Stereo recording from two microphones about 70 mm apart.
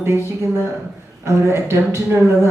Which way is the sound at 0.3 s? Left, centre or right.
Right.